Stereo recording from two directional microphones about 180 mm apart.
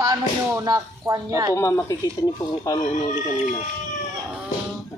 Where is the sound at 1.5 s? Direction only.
15° left (ahead or behind).